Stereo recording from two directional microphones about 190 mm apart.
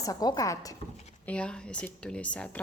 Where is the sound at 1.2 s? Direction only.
5° left (ahead or behind).